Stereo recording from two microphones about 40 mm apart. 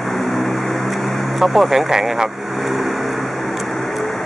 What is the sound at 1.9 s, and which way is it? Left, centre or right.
Speech, centre.